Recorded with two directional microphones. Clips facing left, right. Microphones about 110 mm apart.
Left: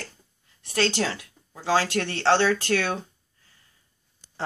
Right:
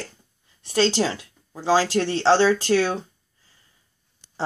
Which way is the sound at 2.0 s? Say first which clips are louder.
Right 4 dB; 15° right (ahead or behind).